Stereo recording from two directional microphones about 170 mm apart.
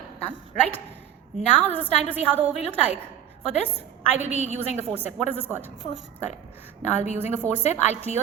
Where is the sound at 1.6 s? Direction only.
10° left (ahead or behind).